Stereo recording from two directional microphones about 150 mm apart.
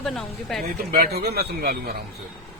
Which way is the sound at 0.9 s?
85° right.